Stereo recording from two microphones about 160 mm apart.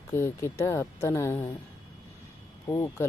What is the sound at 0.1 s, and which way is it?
Speech, 15° left (ahead or behind).